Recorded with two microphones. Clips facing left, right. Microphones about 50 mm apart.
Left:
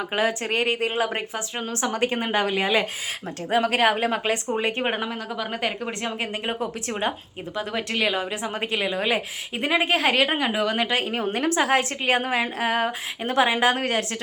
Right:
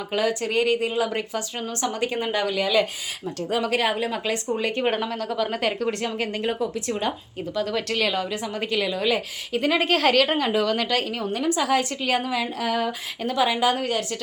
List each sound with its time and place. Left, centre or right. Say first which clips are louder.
0.1 s a woman's voice: right 2 dB; left
1.1 s a woman's voice: right 1 dB; left
6.6 s a woman's voice: right 1 dB; left
9.7 s a woman's voice: even; centre; by 14.0 s left